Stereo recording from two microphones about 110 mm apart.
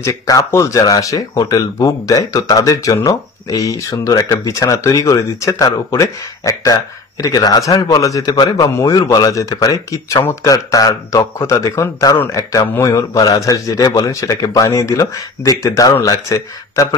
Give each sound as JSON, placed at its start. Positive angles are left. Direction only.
{"t": 0.0, "sound": "speech", "side_deg": 30}